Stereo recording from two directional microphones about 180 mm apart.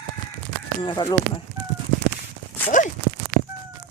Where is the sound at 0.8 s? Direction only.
25° left (ahead or behind).